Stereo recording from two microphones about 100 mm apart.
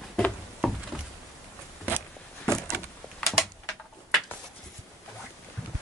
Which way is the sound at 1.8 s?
15° left (ahead or behind).